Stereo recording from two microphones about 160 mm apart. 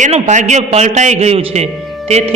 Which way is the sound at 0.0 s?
50° right (ahead or behind).